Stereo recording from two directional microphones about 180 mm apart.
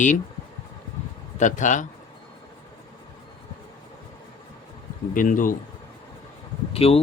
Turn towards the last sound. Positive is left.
turn(degrees=35)  # may be behind; listen again after turning